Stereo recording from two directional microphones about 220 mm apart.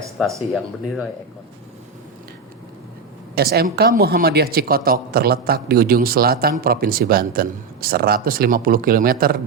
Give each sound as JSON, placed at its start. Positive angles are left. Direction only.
{"t": 0.2, "sound": "speech", "side_deg": 0}
{"t": 3.3, "sound": "a man's voice", "side_deg": -45}